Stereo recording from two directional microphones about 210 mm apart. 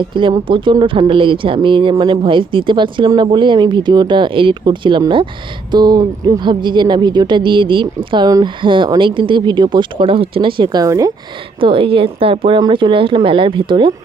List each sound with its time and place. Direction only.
0.1 s speech: 20° right (ahead or behind)